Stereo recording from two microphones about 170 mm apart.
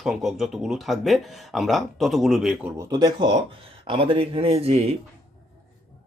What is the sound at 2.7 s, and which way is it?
Speech, 20° right (ahead or behind).